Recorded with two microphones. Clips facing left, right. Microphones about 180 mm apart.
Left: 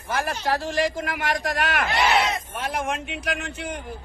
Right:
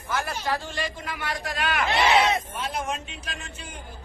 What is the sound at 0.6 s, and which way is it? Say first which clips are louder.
Speech: left 8 dB; 90° left.